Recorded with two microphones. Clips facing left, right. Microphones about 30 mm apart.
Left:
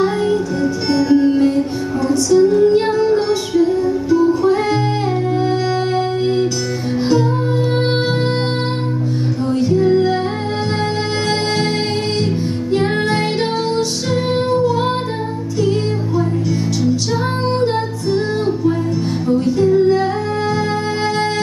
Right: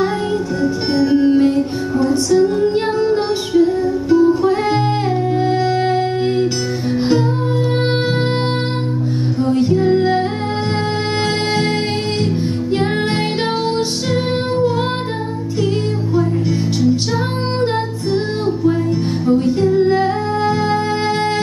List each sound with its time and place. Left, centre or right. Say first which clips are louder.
0.0 s music: left 2 dB; centre
2.3 s female singing: left 5 dB; centre
4.6 s music: right 1 dB; right
5.4 s music: right 1 dB; centre
9.7 s music: even; centre
13.1 s music: left 1 dB; right
19.2 s music: even; right